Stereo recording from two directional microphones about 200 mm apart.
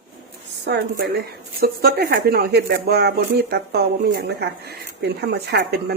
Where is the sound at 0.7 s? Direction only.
50° right (ahead or behind).